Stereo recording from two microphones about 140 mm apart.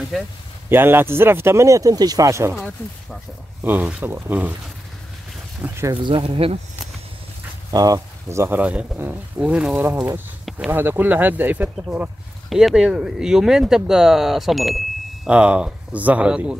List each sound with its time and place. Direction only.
0.7 s speech: 15° right (ahead or behind)
3.6 s speech: 10° right (ahead or behind)
5.6 s speech: 20° right (ahead or behind)
5.9 s speech: 35° right (ahead or behind)
7.7 s speech: 25° right (ahead or behind); by 16.5 s 5° right (ahead or behind)